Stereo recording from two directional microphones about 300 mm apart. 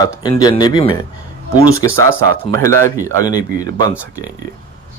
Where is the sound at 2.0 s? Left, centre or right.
Right.